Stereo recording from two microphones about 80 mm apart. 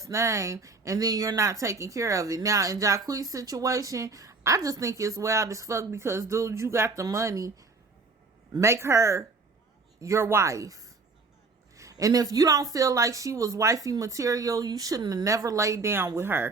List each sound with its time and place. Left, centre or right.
0.0 s a woman's voice: right
8.6 s a woman's voice: right